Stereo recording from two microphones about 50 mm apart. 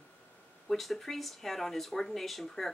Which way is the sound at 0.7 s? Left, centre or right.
Centre.